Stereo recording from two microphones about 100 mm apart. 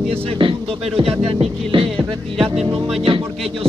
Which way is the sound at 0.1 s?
60° right (ahead or behind).